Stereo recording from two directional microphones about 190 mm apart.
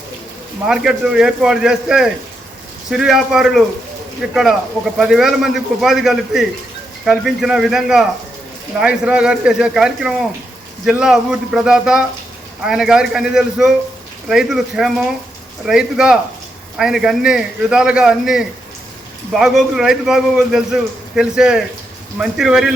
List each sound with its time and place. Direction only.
0.7 s a man's voice: 5° right (ahead or behind)